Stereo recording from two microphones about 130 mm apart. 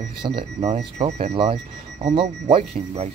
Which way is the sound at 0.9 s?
60° right (ahead or behind).